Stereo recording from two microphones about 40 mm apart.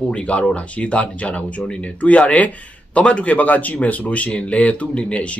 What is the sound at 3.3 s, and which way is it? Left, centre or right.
Speech, left.